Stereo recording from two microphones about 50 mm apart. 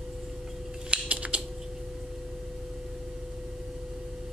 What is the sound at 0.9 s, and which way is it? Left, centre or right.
Typing, right.